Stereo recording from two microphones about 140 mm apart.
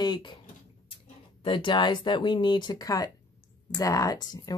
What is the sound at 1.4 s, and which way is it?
Speech, 35° left (ahead or behind).